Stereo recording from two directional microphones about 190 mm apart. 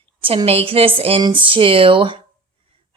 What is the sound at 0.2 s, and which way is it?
Speech, 30° right (ahead or behind).